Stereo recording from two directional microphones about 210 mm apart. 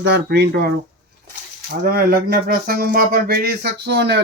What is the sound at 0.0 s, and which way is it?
Speech, 55° right (ahead or behind).